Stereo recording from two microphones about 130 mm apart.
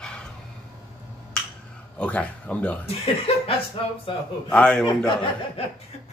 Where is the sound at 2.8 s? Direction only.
50° left (ahead or behind).